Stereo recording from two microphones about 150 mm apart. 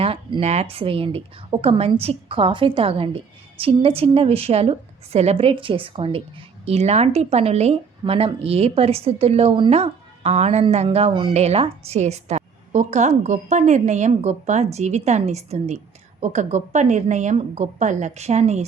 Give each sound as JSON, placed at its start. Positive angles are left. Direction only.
{"t": 0.0, "sound": "a woman's voice", "side_deg": -40}